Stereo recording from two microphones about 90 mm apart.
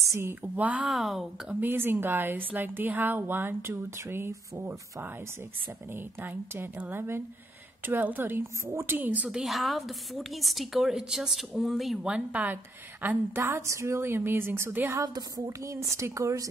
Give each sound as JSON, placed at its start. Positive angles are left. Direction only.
{"t": 0.1, "sound": "a woman's voice", "side_deg": -25}
{"t": 0.8, "sound": "a woman's voice", "side_deg": -5}
{"t": 1.5, "sound": "a woman's voice", "side_deg": -20}
{"t": 9.3, "sound": "a woman's voice", "side_deg": 0}
{"t": 15.0, "sound": "speech", "side_deg": -45}